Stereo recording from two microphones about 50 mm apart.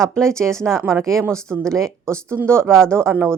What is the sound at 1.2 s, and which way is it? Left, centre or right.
A woman's voice, right.